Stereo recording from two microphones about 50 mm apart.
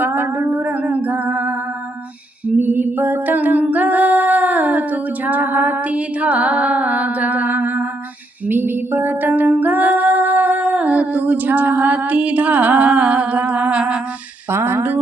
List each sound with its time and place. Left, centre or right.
0.0 s a sound: right
0.5 s music: right
2.6 s humming: right
3.6 s female singing: right
8.4 s music: right
14.5 s speech: right